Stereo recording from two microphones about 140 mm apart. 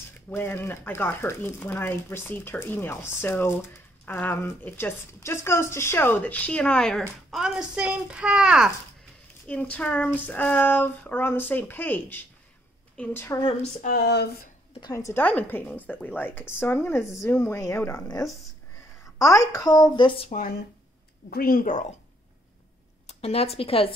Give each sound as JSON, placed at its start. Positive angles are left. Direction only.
{"t": 0.3, "sound": "speech", "side_deg": 15}
{"t": 9.5, "sound": "a woman's voice", "side_deg": 10}
{"t": 13.4, "sound": "speech", "side_deg": 40}
{"t": 13.7, "sound": "speech", "side_deg": 75}
{"t": 14.8, "sound": "speech", "side_deg": 25}
{"t": 20.2, "sound": "speech", "side_deg": 65}
{"t": 21.3, "sound": "a woman's voice", "side_deg": 90}
{"t": 23.0, "sound": "speech", "side_deg": 45}